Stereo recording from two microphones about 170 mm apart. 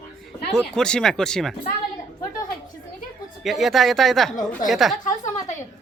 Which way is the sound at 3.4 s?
Centre (ahead or behind).